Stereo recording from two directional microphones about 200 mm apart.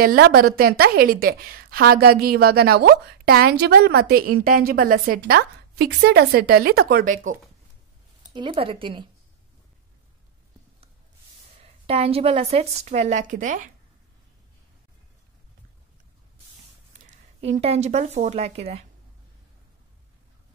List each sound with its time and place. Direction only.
0.0 s a woman's voice: 50° right (ahead or behind)
8.3 s a woman's voice: 25° right (ahead or behind)
11.6 s a woman's voice: 30° right (ahead or behind)
17.0 s speech: 30° right (ahead or behind)